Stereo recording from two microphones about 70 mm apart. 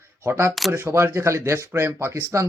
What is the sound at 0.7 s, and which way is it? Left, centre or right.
Speech, right.